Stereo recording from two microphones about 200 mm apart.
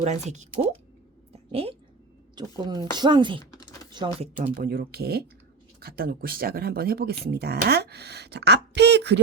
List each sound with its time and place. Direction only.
0.0 s speech: 35° right (ahead or behind)
1.3 s a sound: 30° right (ahead or behind)
2.3 s speech: 20° right (ahead or behind)
3.5 s computer keyboard: 20° left (ahead or behind)
3.9 s speech: 25° right (ahead or behind)
4.4 s speech: 40° right (ahead or behind); by 9.2 s 60° right (ahead or behind)